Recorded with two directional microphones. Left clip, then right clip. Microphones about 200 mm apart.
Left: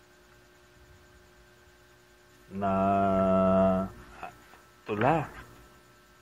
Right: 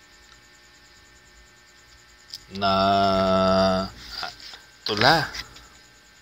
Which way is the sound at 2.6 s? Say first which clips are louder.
Right 6 dB; 25° right (ahead or behind).